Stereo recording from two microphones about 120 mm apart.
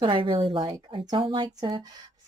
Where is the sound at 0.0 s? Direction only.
45° right (ahead or behind).